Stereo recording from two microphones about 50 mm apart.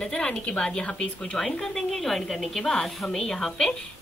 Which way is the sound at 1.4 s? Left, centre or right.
Centre.